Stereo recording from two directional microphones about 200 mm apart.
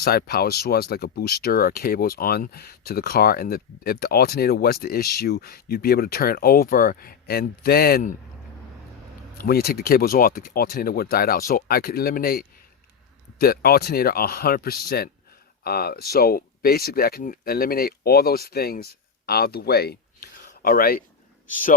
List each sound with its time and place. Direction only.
0.0 s speech: 50° left (ahead or behind)
9.4 s speech: 50° left (ahead or behind)